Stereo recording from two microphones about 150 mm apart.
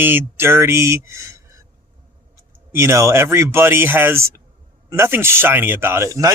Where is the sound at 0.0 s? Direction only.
15° right (ahead or behind).